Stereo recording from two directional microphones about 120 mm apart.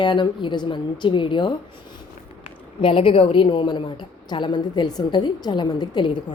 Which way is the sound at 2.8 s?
50° left (ahead or behind).